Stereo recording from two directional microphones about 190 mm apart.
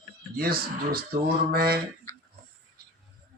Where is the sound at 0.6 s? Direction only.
55° right (ahead or behind).